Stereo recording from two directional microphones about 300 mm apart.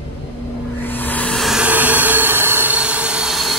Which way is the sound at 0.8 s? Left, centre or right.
Centre.